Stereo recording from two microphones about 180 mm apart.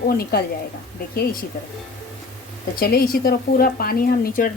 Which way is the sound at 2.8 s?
55° left (ahead or behind).